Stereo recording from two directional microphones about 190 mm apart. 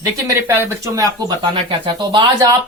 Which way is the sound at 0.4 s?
15° right (ahead or behind).